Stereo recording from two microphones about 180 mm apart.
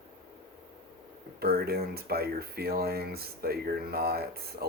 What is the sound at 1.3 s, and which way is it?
Speech, 60° right (ahead or behind).